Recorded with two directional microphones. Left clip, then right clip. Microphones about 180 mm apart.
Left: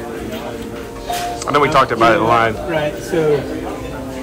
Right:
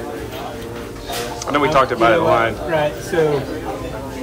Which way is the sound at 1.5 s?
10° right (ahead or behind).